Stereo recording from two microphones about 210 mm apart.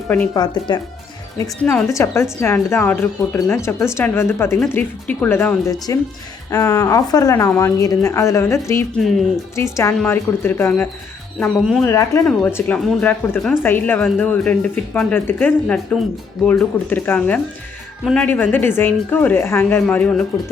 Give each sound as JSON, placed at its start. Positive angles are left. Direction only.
{"t": 0.3, "sound": "speech", "side_deg": 20}